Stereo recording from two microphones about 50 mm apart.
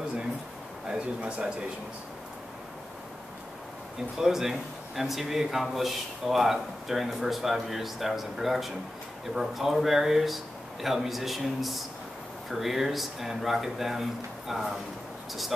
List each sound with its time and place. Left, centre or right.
0.8 s speech: centre
4.2 s speech: centre